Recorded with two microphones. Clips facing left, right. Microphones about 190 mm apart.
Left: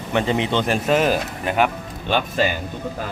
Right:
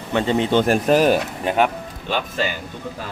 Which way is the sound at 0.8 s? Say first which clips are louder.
Right 1 dB; centre (ahead or behind).